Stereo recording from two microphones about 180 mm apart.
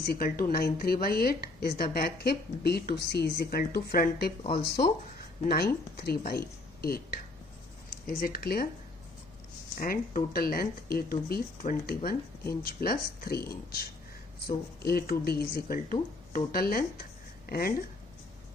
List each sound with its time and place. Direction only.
0.0 s speech: 55° left (ahead or behind)
9.8 s speech: 50° left (ahead or behind)